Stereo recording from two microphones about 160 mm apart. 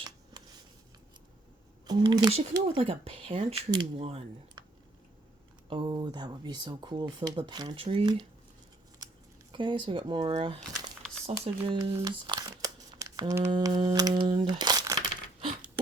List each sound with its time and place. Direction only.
1.9 s speech: 25° right (ahead or behind)
5.6 s speech: 30° right (ahead or behind)
9.5 s speech: 30° right (ahead or behind)
11.9 s speech: 25° right (ahead or behind)
14.6 s crumpling: 25° right (ahead or behind)